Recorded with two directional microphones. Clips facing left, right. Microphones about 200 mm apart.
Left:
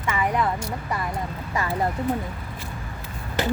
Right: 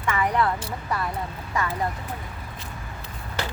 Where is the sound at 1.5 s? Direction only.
30° left (ahead or behind).